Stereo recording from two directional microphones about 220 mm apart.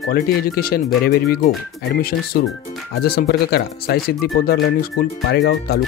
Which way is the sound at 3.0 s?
45° left (ahead or behind).